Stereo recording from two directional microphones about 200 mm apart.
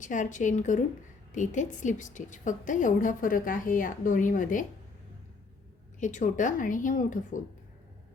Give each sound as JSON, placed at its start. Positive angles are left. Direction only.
{"t": 0.0, "sound": "a woman's voice", "side_deg": 40}
{"t": 6.0, "sound": "a woman's voice", "side_deg": 40}